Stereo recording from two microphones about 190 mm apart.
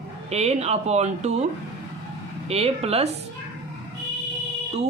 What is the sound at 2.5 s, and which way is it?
Speech, 30° right (ahead or behind).